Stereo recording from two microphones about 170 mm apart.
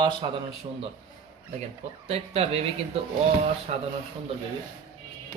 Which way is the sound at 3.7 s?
45° right (ahead or behind).